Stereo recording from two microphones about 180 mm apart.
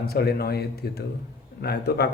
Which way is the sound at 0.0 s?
60° left (ahead or behind).